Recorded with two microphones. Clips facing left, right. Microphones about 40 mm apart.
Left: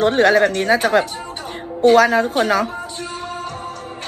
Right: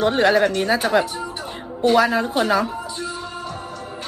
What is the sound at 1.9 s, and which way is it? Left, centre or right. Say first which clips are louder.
Music: left 4 dB; left.